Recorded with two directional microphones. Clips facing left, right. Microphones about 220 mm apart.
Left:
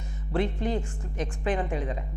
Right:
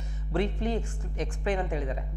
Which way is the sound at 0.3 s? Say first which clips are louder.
Left 1 dB; 10° left (ahead or behind).